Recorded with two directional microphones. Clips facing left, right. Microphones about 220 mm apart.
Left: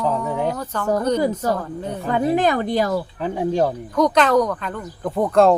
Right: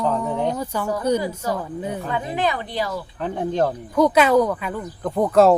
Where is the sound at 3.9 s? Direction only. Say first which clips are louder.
Right 1 dB; 5° right (ahead or behind).